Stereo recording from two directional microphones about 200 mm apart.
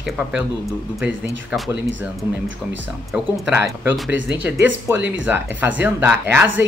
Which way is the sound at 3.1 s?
5° right (ahead or behind).